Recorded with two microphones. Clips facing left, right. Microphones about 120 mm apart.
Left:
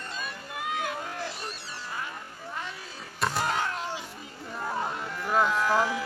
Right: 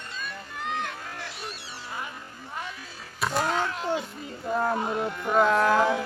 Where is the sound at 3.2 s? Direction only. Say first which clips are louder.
Right 2 dB; centre (ahead or behind).